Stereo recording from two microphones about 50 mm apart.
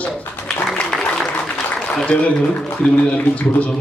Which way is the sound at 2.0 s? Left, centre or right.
Left.